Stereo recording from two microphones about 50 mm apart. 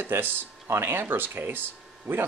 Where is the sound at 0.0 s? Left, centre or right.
Right.